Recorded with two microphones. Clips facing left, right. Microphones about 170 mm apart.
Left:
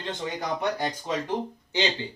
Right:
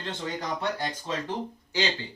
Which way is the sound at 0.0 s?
15° left (ahead or behind).